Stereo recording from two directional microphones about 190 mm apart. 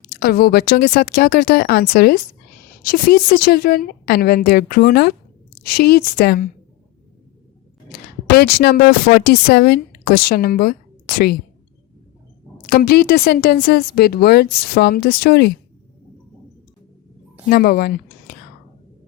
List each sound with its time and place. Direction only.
0.1 s a woman's voice: 55° left (ahead or behind)
8.4 s speech: 55° left (ahead or behind)
12.6 s speech: 50° left (ahead or behind)
17.5 s speech: 55° left (ahead or behind)